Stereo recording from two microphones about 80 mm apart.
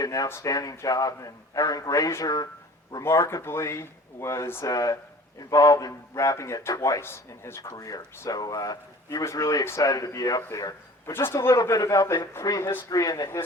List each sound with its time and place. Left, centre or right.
0.0 s a sound: left
0.4 s a man's voice: left
3.0 s speech: left
4.6 s a man's voice: left
7.0 s speech: left
7.8 s a man's voice: left
11.0 s speech: left
11.3 s a man's voice: left